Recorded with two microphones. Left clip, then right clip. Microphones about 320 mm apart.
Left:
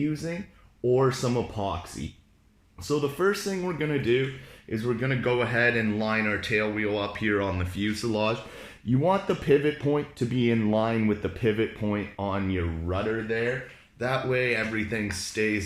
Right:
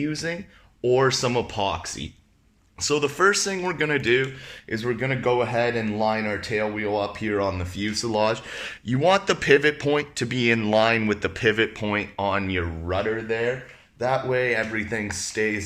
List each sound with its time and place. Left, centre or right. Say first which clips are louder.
0.1 s speech: right 4 dB; right
2.8 s speech: right 5 dB; right
4.7 s speech: right 3 dB; right